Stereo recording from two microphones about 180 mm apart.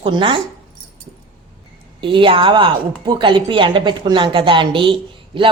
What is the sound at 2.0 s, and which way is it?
A woman's voice, 30° right (ahead or behind).